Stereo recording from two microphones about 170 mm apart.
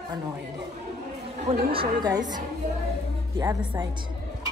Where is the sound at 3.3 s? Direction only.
25° right (ahead or behind).